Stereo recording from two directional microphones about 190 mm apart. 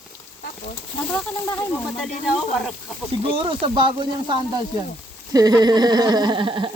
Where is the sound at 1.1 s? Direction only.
10° left (ahead or behind).